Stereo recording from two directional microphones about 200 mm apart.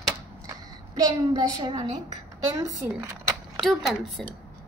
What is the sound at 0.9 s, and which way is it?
A child's voice, 20° right (ahead or behind).